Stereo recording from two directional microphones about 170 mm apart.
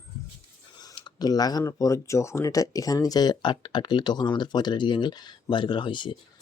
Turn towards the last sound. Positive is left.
turn(degrees=30)  # may be behind; listen again after turning